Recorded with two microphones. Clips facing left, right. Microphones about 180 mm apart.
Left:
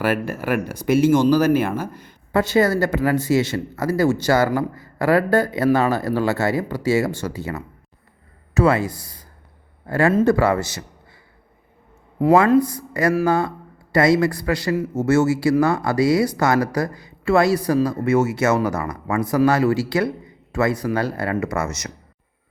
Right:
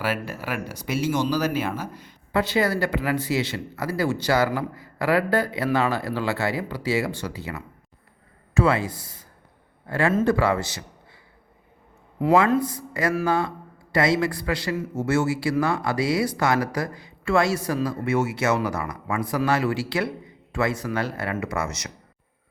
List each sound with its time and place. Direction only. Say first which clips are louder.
0.0 s a man's voice: left 6 dB; 50° left (ahead or behind)
12.2 s a man's voice: left 5 dB; 40° left (ahead or behind)